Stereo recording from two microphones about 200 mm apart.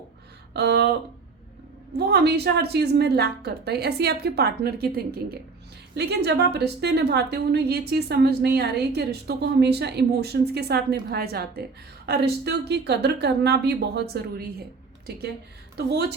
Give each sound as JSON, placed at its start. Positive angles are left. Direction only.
{"t": 0.5, "sound": "a woman's voice", "side_deg": -55}
{"t": 1.9, "sound": "a woman's voice", "side_deg": -55}
{"t": 15.9, "sound": "a woman's voice", "side_deg": -55}